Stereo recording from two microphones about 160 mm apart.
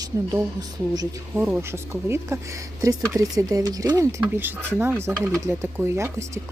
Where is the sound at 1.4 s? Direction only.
10° right (ahead or behind).